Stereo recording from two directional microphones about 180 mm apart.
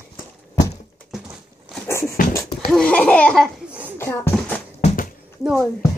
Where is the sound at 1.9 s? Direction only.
15° left (ahead or behind).